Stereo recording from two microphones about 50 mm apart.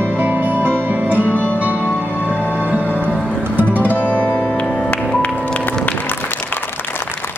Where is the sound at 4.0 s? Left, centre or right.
Left.